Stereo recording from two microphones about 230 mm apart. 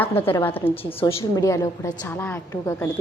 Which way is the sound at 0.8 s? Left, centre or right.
Centre.